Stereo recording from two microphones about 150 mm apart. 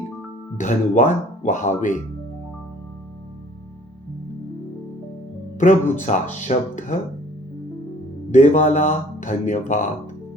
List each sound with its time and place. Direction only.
0.5 s speech: 55° left (ahead or behind)
5.5 s speech: 55° left (ahead or behind)
8.3 s speech: 55° left (ahead or behind)